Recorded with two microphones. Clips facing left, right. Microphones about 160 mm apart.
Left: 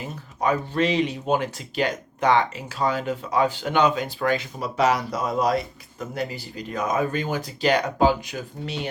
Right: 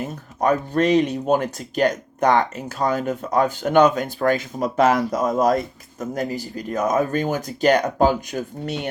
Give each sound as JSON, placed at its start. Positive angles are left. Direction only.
{"t": 0.0, "sound": "speech", "side_deg": -50}